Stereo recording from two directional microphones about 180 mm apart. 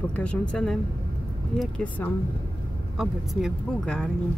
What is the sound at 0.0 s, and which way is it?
Speech, 5° left (ahead or behind).